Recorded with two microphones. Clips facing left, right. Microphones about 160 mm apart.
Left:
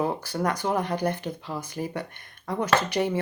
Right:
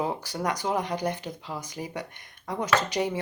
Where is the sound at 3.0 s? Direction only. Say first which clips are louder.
Left 2 dB; 15° right (ahead or behind).